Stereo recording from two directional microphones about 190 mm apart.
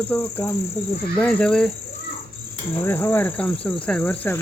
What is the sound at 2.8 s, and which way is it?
Cricket, 10° left (ahead or behind).